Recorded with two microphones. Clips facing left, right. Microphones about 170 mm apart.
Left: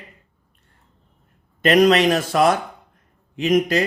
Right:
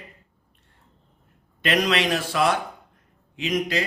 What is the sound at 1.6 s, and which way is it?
A man's voice, 45° left (ahead or behind).